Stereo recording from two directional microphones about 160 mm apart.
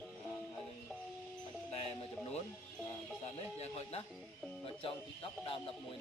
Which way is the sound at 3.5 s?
40° left (ahead or behind).